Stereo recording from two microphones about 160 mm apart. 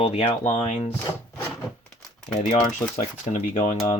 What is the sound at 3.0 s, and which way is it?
Speech, 45° left (ahead or behind).